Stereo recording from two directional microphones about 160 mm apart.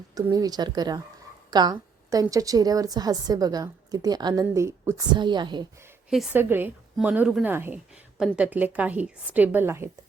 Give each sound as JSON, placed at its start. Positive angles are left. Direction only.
{"t": 0.1, "sound": "a woman's voice", "side_deg": -20}
{"t": 1.5, "sound": "a sound", "side_deg": -25}
{"t": 2.3, "sound": "a woman's voice", "side_deg": -20}
{"t": 5.1, "sound": "a woman's voice", "side_deg": -30}
{"t": 6.1, "sound": "a woman's voice", "side_deg": -5}
{"t": 6.4, "sound": "a woman's voice", "side_deg": -15}